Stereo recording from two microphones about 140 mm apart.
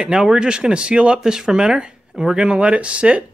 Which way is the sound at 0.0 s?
5° right (ahead or behind).